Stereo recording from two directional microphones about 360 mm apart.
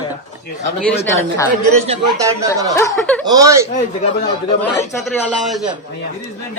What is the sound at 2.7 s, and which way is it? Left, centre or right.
Speech, centre.